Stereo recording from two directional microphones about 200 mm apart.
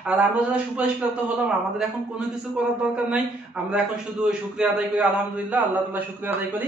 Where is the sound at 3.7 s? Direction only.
5° right (ahead or behind).